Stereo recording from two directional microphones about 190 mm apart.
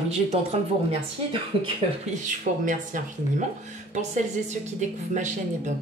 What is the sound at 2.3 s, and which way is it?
Speech, 45° right (ahead or behind).